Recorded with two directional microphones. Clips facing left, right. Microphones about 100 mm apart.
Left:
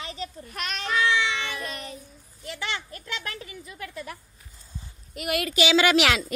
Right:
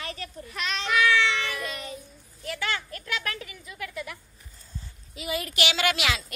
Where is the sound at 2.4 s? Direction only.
20° left (ahead or behind).